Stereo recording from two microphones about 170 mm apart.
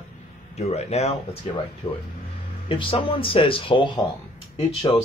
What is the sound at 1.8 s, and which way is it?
Speech, 25° left (ahead or behind).